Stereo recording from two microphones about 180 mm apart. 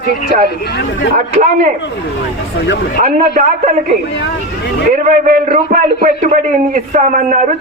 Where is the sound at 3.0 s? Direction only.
40° right (ahead or behind).